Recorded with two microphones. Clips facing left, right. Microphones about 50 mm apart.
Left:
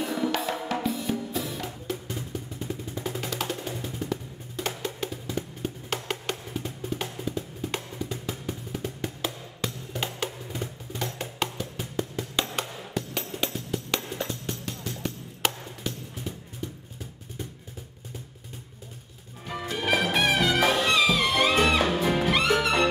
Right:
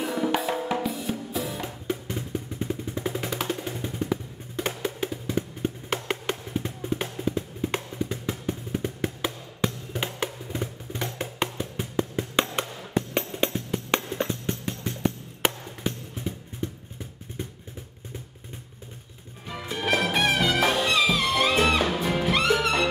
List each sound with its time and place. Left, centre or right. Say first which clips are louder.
0.0 s drum: right 1 dB; centre
0.7 s music: left 1 dB; centre
1.6 s music: right 2 dB; centre
3.5 s music: right 1 dB; centre
4.0 s music: right 3 dB; right
19.8 s music: right 1 dB; centre